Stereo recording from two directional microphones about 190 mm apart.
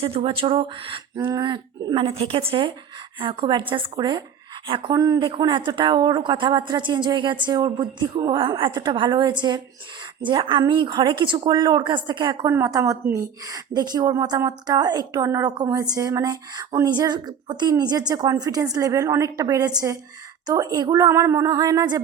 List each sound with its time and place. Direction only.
0.0 s a woman's voice: 30° right (ahead or behind)